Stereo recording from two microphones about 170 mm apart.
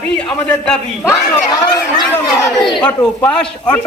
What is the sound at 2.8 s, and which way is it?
Speech, 10° left (ahead or behind).